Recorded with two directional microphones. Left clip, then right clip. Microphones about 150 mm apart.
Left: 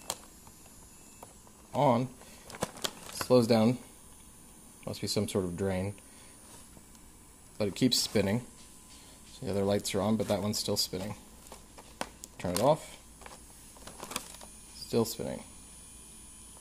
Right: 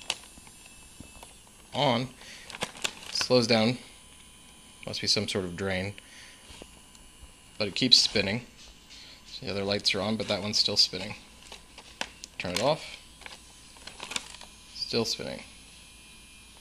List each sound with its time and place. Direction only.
1.7 s a sound: 15° left (ahead or behind)
4.8 s speech: 15° left (ahead or behind)
7.5 s speech: 30° left (ahead or behind)
12.4 s speech: 25° left (ahead or behind)
13.8 s a sound: 20° left (ahead or behind)
14.9 s speech: 30° left (ahead or behind)